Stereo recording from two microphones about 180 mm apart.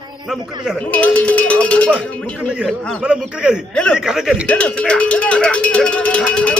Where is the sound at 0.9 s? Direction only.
10° left (ahead or behind).